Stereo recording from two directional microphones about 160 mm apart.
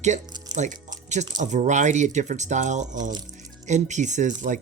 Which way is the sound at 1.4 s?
50° right (ahead or behind).